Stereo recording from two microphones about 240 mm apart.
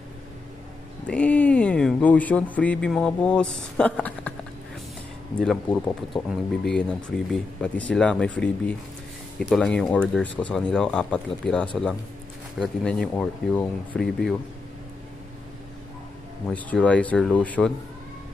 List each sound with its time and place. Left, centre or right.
1.0 s speech: centre
5.4 s speech: centre
16.4 s speech: centre